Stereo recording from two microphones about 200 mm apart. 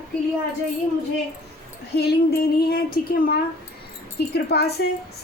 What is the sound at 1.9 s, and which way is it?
Female singing, 55° left (ahead or behind).